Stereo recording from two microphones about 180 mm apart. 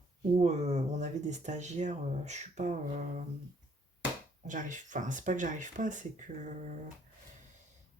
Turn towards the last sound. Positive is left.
turn(degrees=-45)  # may be behind; listen again after turning